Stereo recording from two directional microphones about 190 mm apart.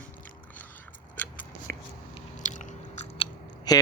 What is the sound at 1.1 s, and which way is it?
Scissors, 10° left (ahead or behind).